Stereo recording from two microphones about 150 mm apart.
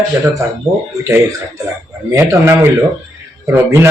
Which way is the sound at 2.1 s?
15° right (ahead or behind).